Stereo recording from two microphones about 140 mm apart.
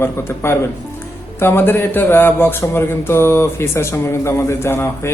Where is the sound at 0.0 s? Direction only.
15° left (ahead or behind).